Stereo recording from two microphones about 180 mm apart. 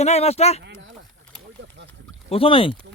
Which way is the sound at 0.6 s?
75° right (ahead or behind).